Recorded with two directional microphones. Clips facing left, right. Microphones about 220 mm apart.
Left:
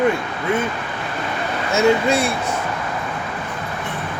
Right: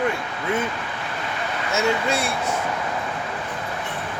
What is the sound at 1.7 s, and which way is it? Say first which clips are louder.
Speech: left 7 dB; 15° left (ahead or behind).